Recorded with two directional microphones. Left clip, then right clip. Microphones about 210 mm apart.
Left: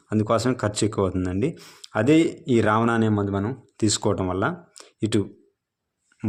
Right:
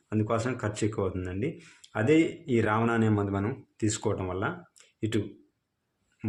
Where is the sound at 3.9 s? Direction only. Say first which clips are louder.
Left 7 dB; 45° left (ahead or behind).